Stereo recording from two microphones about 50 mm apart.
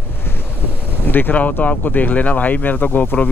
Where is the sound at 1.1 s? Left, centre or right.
Left.